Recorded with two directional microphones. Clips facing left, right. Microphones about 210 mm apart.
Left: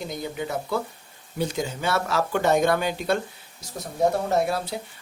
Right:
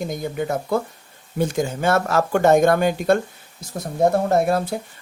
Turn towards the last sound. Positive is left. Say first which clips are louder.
# right 7 dB
turn(degrees=-50)  # may be behind; listen again after turning